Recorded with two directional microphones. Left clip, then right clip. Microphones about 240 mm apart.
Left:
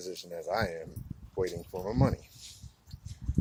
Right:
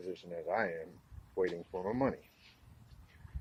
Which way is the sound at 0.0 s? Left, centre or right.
Centre.